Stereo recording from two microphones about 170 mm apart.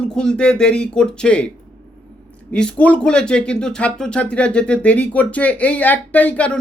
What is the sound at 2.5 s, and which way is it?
Speech, 5° left (ahead or behind).